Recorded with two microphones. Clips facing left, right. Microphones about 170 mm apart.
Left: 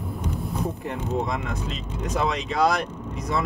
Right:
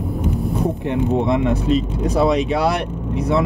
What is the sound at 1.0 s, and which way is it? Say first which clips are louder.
Speech: right 9 dB; 65° right (ahead or behind).